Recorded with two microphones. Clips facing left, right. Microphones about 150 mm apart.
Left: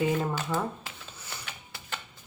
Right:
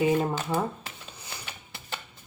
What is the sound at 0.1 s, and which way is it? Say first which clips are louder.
Speech: right 3 dB; 20° right (ahead or behind).